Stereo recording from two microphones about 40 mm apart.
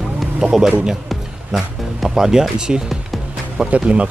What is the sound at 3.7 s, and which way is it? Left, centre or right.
Speech, right.